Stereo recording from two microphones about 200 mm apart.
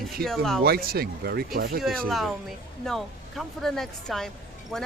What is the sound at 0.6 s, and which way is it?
Speech, 50° right (ahead or behind).